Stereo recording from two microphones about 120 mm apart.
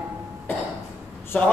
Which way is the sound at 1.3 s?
15° left (ahead or behind).